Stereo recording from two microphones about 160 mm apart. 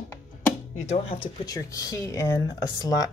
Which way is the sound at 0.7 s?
45° left (ahead or behind).